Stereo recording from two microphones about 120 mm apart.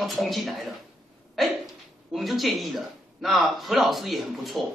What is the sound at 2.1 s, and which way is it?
A man's voice, centre (ahead or behind).